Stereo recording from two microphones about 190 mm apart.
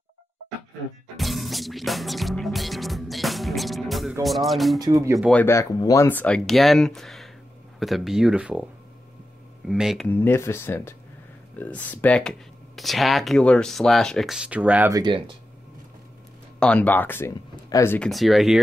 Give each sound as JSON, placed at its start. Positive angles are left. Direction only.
{"t": 1.1, "sound": "music", "side_deg": 0}
{"t": 4.1, "sound": "speech", "side_deg": 0}
{"t": 5.3, "sound": "speech", "side_deg": 10}
{"t": 9.7, "sound": "speech", "side_deg": 0}
{"t": 10.0, "sound": "speech", "side_deg": 10}
{"t": 14.9, "sound": "speech", "side_deg": -20}
{"t": 16.5, "sound": "speech", "side_deg": 5}